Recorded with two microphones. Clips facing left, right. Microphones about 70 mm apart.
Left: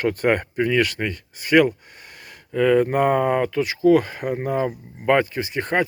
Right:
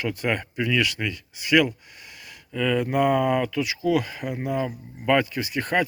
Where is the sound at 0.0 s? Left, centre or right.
Left.